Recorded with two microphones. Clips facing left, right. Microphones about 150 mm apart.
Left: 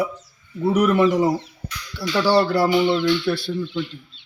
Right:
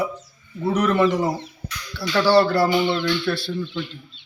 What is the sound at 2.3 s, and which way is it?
A man's voice, 20° left (ahead or behind).